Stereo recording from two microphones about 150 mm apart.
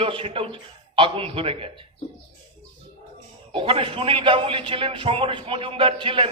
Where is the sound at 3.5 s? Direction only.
35° right (ahead or behind).